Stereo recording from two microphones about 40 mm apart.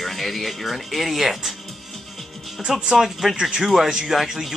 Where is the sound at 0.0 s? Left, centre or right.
Centre.